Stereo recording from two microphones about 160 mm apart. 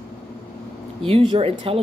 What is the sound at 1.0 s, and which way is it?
Speech, 35° right (ahead or behind).